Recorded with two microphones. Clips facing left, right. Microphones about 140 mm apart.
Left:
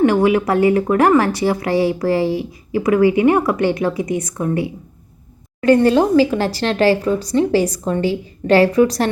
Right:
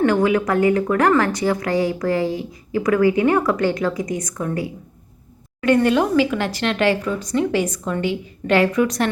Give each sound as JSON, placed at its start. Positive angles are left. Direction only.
{"t": 0.0, "sound": "speech", "side_deg": 25}
{"t": 5.5, "sound": "speech", "side_deg": 35}